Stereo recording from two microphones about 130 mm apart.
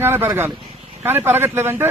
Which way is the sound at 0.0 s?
15° right (ahead or behind).